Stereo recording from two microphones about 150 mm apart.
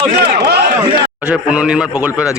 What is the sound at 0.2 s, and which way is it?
Run, 90° right.